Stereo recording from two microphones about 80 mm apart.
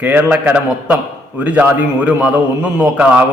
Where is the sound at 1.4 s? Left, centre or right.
Centre.